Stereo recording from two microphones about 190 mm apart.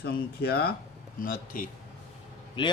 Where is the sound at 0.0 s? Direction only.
55° left (ahead or behind).